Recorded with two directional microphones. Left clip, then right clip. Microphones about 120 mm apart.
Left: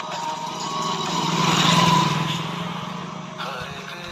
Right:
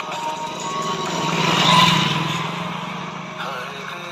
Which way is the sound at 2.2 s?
40° right (ahead or behind).